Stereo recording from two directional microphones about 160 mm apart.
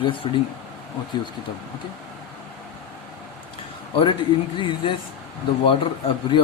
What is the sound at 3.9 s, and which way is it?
Speech, 30° left (ahead or behind).